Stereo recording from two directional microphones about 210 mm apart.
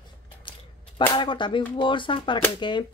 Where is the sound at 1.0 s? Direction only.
20° left (ahead or behind).